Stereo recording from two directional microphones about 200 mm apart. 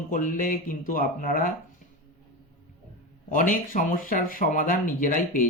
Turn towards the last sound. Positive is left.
turn(degrees=40)  # may be behind; listen again after turning